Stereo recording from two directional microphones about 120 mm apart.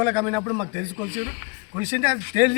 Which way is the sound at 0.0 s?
20° right (ahead or behind).